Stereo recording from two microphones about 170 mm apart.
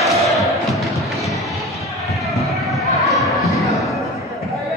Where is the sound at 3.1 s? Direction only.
Centre (ahead or behind).